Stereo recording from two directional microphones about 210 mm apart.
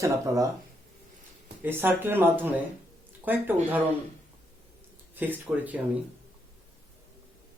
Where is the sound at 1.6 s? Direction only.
10° right (ahead or behind).